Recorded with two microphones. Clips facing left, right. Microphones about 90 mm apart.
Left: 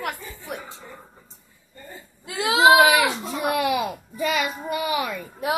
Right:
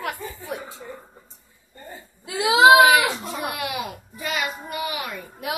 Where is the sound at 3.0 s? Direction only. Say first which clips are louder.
Left 2 dB; centre (ahead or behind).